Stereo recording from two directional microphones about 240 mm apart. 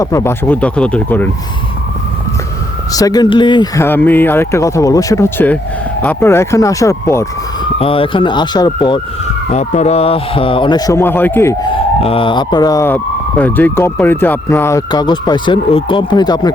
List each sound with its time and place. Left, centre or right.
0.0 s a man's voice: centre
2.9 s a man's voice: centre
7.8 s speech: left
9.5 s a man's voice: left